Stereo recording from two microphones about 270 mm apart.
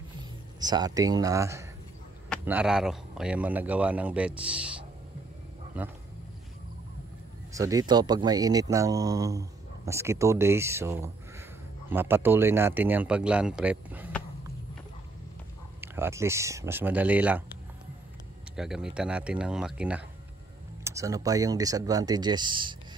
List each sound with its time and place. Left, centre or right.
0.2 s speech: centre
7.5 s speech: centre
15.8 s speech: centre
18.6 s speech: centre